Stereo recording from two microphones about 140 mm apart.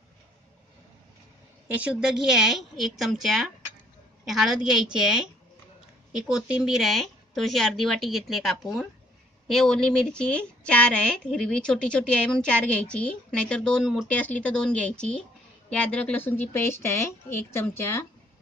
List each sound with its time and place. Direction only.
1.7 s a woman's voice: 10° right (ahead or behind); by 18.0 s 20° left (ahead or behind)